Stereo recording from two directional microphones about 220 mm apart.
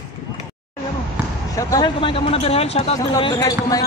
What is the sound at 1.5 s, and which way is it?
Speech, 15° left (ahead or behind).